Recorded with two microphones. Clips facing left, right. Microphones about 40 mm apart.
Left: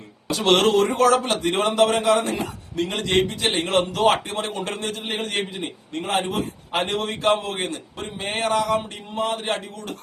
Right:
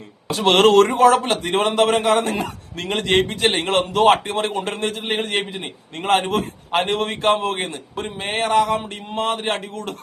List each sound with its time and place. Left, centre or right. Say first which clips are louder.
0.3 s a man's voice: right 2 dB; right
0.6 s speech: right 6 dB; right
1.1 s a man's voice: right 2 dB; right
6.7 s a man's voice: right 4 dB; right